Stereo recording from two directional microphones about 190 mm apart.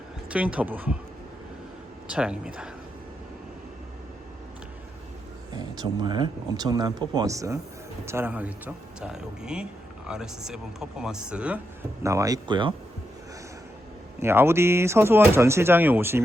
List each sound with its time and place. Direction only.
0.3 s speech: 5° right (ahead or behind)
2.0 s speech: 5° right (ahead or behind)
5.5 s speech: 25° right (ahead or behind); by 11.6 s 5° right (ahead or behind)
12.0 s speech: 15° right (ahead or behind)
14.2 s speech: 15° right (ahead or behind)